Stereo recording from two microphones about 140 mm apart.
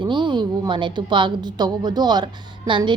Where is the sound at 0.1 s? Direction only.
35° right (ahead or behind).